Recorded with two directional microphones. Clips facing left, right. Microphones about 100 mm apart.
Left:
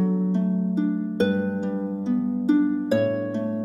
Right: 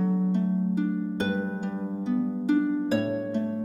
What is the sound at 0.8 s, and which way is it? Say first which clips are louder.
Harp: left 5 dB; 20° left (ahead or behind).